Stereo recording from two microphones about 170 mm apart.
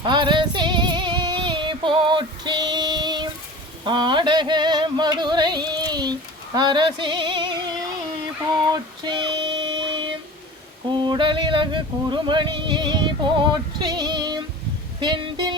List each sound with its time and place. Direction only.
0.0 s music: 25° right (ahead or behind)
3.8 s a sound: 30° right (ahead or behind)
8.6 s a sound: 25° right (ahead or behind)
10.9 s yodeling: 25° right (ahead or behind)
13.7 s music: 25° right (ahead or behind)
15.0 s yodeling: 25° right (ahead or behind)